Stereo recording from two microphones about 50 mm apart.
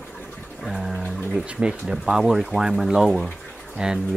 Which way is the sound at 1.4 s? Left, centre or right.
Centre.